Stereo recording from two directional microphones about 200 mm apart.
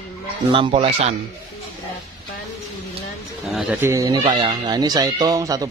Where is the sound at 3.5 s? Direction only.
5° right (ahead or behind).